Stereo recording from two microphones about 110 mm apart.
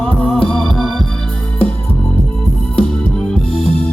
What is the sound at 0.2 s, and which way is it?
Music, 5° left (ahead or behind).